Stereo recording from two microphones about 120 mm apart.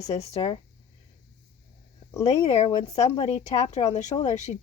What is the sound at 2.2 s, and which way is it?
Speech, 60° left (ahead or behind).